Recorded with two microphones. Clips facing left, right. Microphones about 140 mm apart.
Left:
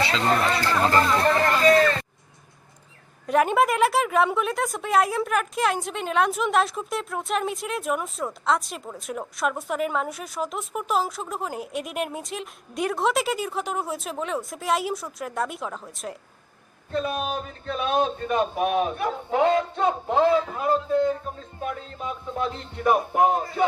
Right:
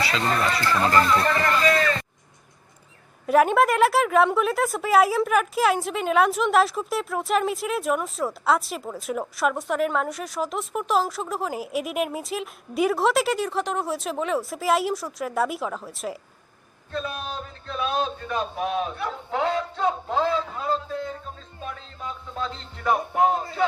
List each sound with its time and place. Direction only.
0.0 s a man's voice: 25° left (ahead or behind)
3.2 s a woman's voice: centre (ahead or behind)
16.9 s a man's voice: 15° left (ahead or behind)
21.6 s music: 20° left (ahead or behind)